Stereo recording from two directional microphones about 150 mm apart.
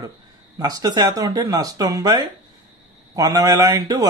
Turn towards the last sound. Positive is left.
turn(degrees=-25)  # may be behind; listen again after turning